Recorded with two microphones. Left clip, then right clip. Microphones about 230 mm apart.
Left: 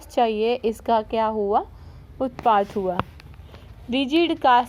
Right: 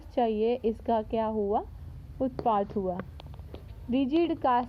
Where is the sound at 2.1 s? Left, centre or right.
Left.